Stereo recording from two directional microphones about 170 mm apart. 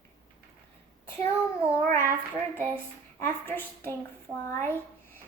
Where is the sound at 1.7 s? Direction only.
15° left (ahead or behind).